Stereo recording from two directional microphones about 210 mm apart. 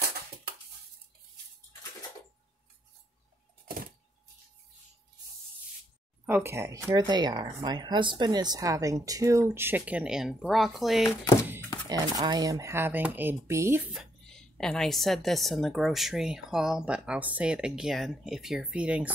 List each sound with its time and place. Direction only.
6.2 s speech: 10° right (ahead or behind)
11.9 s speech: 20° right (ahead or behind)
14.2 s speech: centre (ahead or behind)